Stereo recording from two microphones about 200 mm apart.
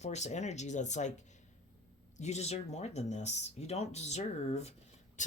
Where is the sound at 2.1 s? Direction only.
35° left (ahead or behind).